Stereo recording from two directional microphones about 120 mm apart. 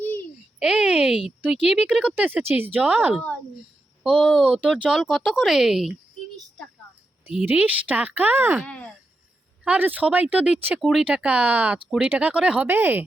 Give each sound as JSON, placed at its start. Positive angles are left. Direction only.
{"t": 0.6, "sound": "a sound", "side_deg": -5}
{"t": 1.6, "sound": "speech", "side_deg": -5}
{"t": 4.0, "sound": "speech", "side_deg": -5}
{"t": 7.4, "sound": "speech", "side_deg": -15}
{"t": 8.6, "sound": "speech", "side_deg": 5}
{"t": 9.6, "sound": "speech", "side_deg": -15}